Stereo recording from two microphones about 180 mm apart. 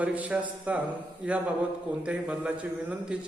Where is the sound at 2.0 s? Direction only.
5° right (ahead or behind).